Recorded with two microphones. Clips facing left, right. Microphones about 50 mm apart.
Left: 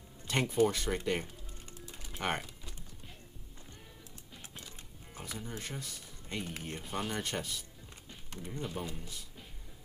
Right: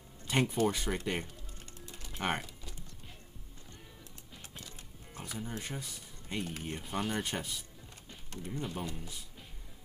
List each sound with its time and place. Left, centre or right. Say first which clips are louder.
0.3 s speech: left 1 dB; centre
2.0 s typing: right 1 dB; centre
4.4 s music: even; centre
5.2 s music: right 2 dB; centre
5.6 s speech: right 1 dB; centre